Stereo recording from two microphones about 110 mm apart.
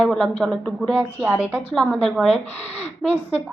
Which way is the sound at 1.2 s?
15° right (ahead or behind).